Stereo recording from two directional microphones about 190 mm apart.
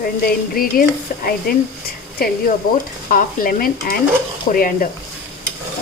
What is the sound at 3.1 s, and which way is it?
Speech, 45° left (ahead or behind).